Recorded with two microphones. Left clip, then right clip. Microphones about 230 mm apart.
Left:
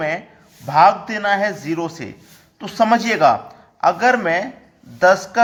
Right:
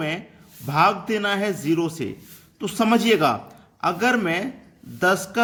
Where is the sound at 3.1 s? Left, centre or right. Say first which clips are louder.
Left 7 dB; centre.